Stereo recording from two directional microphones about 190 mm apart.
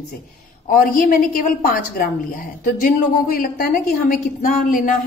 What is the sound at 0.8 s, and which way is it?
A woman's voice, 50° left (ahead or behind).